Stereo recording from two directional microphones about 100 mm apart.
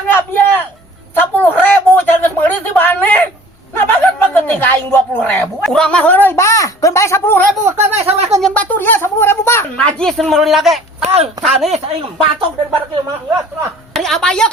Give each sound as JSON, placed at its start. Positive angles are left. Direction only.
{"t": 0.1, "sound": "a sound", "side_deg": 20}
{"t": 3.8, "sound": "speech", "side_deg": 20}
{"t": 5.6, "sound": "speech", "side_deg": 5}
{"t": 7.8, "sound": "speech", "side_deg": -90}
{"t": 8.4, "sound": "speech", "side_deg": 5}
{"t": 8.7, "sound": "speech", "side_deg": 20}
{"t": 9.7, "sound": "speech", "side_deg": 10}
{"t": 11.0, "sound": "speech", "side_deg": -90}
{"t": 11.7, "sound": "speech", "side_deg": -75}
{"t": 13.9, "sound": "a woman's voice", "side_deg": 5}